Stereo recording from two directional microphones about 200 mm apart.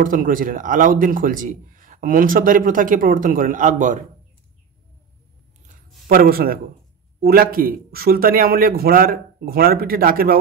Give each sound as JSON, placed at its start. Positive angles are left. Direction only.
{"t": 0.0, "sound": "speech", "side_deg": -45}
{"t": 6.0, "sound": "speech", "side_deg": -45}